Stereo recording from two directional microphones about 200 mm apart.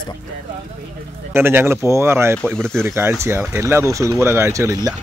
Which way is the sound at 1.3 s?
10° right (ahead or behind).